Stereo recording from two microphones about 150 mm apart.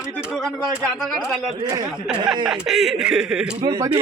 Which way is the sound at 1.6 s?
25° right (ahead or behind).